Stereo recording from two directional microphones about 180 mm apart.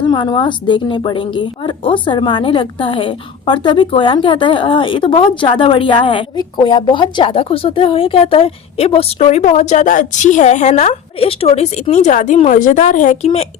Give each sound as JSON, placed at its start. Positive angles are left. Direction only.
{"t": 0.0, "sound": "a woman's voice", "side_deg": 25}